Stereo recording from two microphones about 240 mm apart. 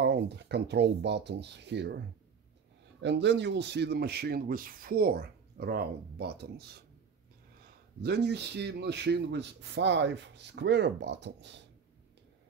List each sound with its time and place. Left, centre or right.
0.0 s speech: right
3.0 s speech: right
8.0 s speech: right